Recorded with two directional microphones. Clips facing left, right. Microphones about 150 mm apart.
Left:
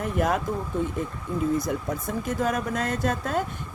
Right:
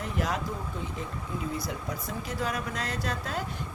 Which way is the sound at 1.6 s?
50° left (ahead or behind).